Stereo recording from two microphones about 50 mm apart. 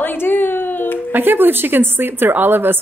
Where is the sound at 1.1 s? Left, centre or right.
Right.